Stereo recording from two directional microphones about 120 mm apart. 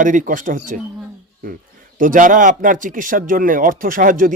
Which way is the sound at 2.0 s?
90° right.